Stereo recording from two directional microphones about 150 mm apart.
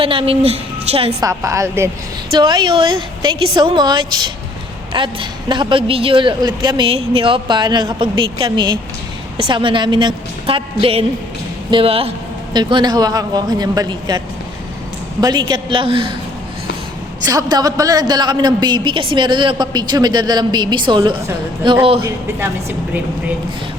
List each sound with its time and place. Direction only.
0.0 s a man's voice: 35° right (ahead or behind)
1.2 s a woman's voice: 20° right (ahead or behind)
2.3 s a man's voice: 30° right (ahead or behind)
15.2 s a man's voice: 30° right (ahead or behind)
17.2 s a woman's voice: 25° right (ahead or behind)